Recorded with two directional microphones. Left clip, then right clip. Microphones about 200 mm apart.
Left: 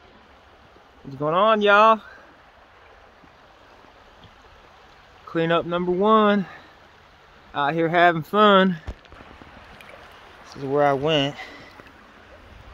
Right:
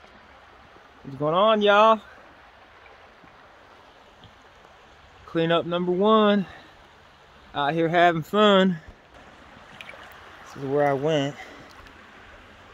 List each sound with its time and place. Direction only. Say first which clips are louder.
1.2 s speech: left 1 dB; 10° right (ahead or behind)
5.3 s speech: left 1 dB; 5° right (ahead or behind)
10.7 s speech: left 3 dB; centre (ahead or behind)